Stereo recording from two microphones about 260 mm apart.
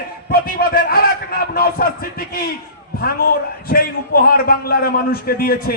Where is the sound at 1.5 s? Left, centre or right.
Left.